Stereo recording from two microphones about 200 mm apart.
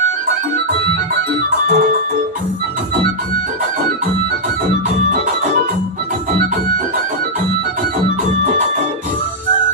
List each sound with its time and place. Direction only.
1.6 s music: 40° right (ahead or behind)